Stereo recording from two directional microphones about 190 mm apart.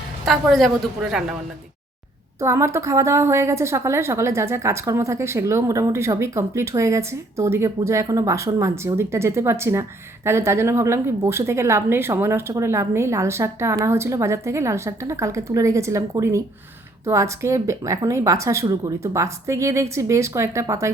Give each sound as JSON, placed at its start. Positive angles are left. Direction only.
{"t": 0.3, "sound": "a woman's voice", "side_deg": 0}
{"t": 2.4, "sound": "a woman's voice", "side_deg": -15}